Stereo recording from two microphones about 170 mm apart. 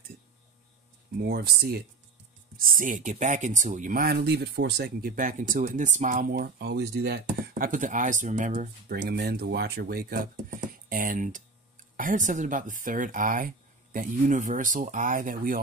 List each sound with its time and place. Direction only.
1.1 s speech: 65° right (ahead or behind)
2.5 s speech: 55° right (ahead or behind)